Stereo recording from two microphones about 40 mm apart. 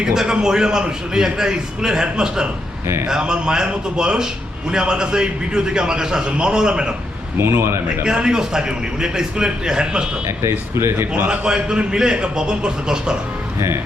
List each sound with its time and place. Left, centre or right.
0.0 s a man's voice: centre
7.3 s a man's voice: right
8.0 s a man's voice: centre
11.4 s a man's voice: right